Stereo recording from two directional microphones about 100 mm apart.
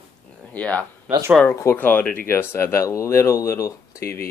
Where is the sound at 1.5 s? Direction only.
30° left (ahead or behind).